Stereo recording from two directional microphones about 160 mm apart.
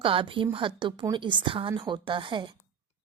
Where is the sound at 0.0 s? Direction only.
35° right (ahead or behind).